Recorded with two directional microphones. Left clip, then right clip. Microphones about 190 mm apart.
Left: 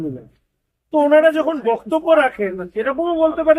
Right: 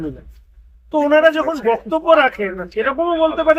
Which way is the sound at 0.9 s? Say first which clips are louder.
Even; 5° left (ahead or behind).